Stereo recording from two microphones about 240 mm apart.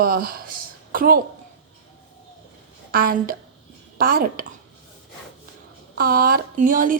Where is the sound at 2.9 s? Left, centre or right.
Right.